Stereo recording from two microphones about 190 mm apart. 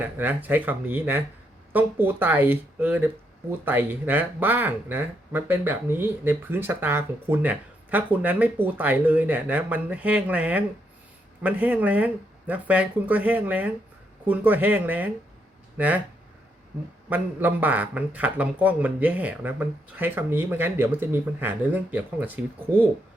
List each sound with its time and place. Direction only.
0.0 s speech: 10° right (ahead or behind)
17.1 s speech: 10° right (ahead or behind)